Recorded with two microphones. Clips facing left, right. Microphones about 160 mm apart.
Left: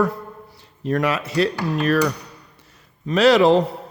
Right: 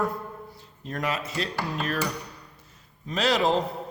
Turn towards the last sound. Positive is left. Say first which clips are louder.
# left 9 dB
turn(degrees=75)  # may be behind; listen again after turning